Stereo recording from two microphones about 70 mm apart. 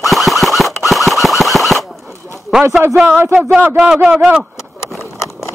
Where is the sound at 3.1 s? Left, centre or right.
Right.